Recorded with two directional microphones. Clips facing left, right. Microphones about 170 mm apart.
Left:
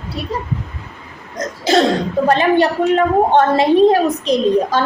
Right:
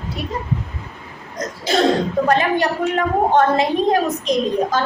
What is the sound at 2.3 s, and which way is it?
A woman's voice, 30° left (ahead or behind).